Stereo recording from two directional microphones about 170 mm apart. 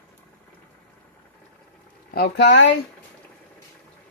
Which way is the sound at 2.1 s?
70° left (ahead or behind).